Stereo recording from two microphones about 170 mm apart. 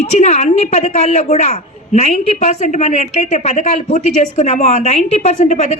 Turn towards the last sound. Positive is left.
turn(degrees=40)  # may be behind; listen again after turning